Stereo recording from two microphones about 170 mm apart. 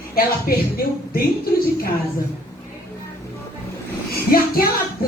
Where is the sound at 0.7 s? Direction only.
60° left (ahead or behind).